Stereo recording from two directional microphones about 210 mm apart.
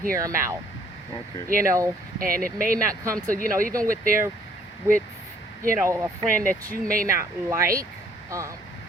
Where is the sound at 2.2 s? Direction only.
40° right (ahead or behind).